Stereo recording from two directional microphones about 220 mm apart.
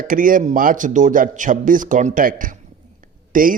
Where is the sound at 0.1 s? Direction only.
40° right (ahead or behind).